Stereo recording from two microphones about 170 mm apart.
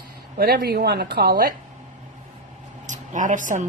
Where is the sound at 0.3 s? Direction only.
65° right (ahead or behind).